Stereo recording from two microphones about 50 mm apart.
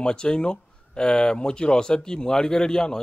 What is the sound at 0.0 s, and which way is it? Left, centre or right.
A man's voice, centre.